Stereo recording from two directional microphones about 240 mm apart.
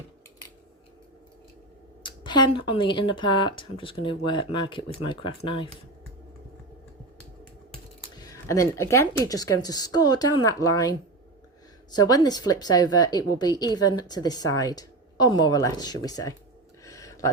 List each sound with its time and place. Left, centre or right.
2.0 s speech: centre
8.1 s a woman's voice: centre
11.9 s a woman's voice: centre
16.8 s a sound: centre